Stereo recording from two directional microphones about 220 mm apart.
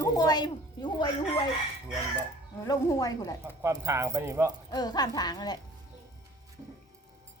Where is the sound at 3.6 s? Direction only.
10° right (ahead or behind).